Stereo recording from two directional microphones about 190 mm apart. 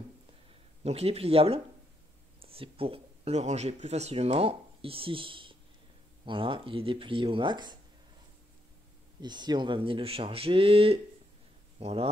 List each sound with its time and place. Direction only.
0.8 s speech: 30° right (ahead or behind)
9.2 s speech: 25° right (ahead or behind)